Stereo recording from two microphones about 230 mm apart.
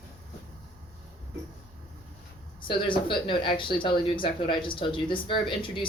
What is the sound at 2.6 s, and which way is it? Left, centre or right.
Speech, left.